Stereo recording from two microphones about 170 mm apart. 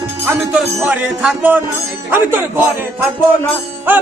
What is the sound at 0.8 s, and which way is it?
Speech, 10° right (ahead or behind).